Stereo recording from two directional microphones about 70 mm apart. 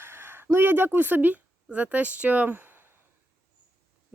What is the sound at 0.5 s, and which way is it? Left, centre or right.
Speech, right.